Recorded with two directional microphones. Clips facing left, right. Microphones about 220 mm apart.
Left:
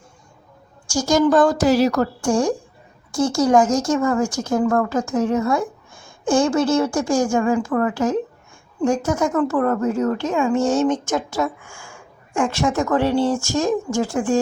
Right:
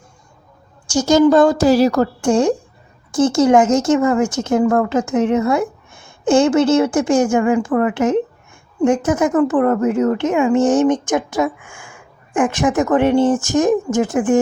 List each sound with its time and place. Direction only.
0.9 s a woman's voice: 25° right (ahead or behind)